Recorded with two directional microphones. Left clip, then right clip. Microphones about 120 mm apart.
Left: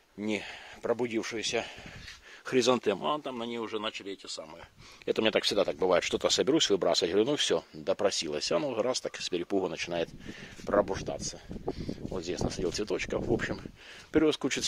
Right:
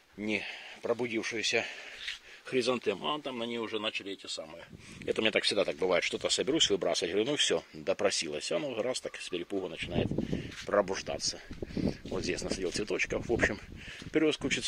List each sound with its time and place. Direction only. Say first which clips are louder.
0.2 s speech: even; 25° left (ahead or behind)
1.3 s speech: right 1 dB; 10° left (ahead or behind)
2.4 s speech: left 4 dB; 55° left (ahead or behind)
2.9 s speech: left 3 dB; 30° left (ahead or behind)
3.3 s speech: even; 10° left (ahead or behind)
5.0 s speech: left 1 dB; 30° left (ahead or behind)
5.9 s speech: left 3 dB; 40° left (ahead or behind)
7.3 s speech: left 1 dB; 20° left (ahead or behind)
8.3 s speech: left 4 dB; 35° left (ahead or behind)
9.3 s speech: left 5 dB; 50° left (ahead or behind)
10.7 s speech: left 1 dB; 10° left (ahead or behind)
12.7 s speech: even; 15° left (ahead or behind)
14.1 s speech: left 2 dB; 25° left (ahead or behind)